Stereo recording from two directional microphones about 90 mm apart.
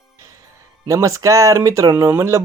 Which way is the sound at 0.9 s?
35° right (ahead or behind).